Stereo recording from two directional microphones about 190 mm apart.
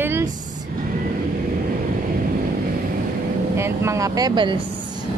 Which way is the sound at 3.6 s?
15° right (ahead or behind).